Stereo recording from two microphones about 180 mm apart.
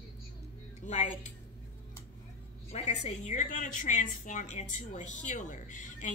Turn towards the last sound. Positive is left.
turn(degrees=45)  # may be behind; listen again after turning